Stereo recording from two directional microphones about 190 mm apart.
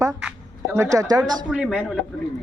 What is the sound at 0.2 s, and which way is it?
Speech, 10° right (ahead or behind).